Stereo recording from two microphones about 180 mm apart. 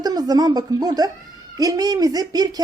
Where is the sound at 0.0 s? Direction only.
20° right (ahead or behind).